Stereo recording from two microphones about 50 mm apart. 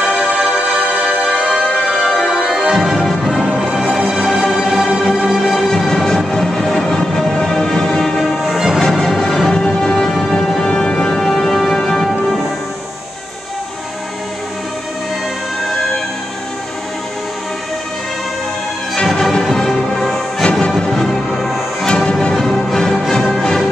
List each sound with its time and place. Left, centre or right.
0.0 s music: centre
2.0 s music: centre
3.4 s music: right
3.9 s music: centre
9.5 s music: centre
19.1 s music: centre
21.8 s music: centre